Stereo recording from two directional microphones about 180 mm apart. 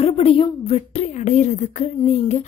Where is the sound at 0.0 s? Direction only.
30° left (ahead or behind).